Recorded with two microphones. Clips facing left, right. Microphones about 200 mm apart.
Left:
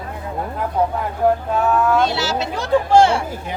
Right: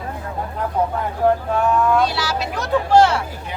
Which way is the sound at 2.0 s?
25° left (ahead or behind).